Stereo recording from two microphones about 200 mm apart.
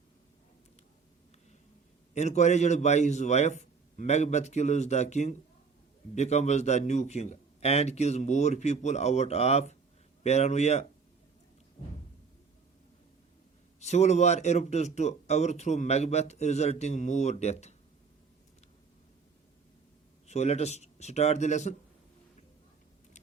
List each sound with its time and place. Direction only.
2.1 s speech: 35° left (ahead or behind)
13.7 s speech: 35° left (ahead or behind)
20.2 s speech: 35° left (ahead or behind)